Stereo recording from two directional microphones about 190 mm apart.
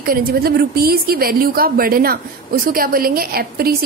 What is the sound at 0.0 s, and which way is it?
A woman's voice, 50° right (ahead or behind).